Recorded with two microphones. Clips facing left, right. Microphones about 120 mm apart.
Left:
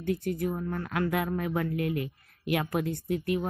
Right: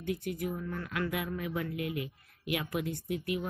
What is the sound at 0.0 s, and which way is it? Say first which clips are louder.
A woman's voice: left 5 dB; 45° left (ahead or behind).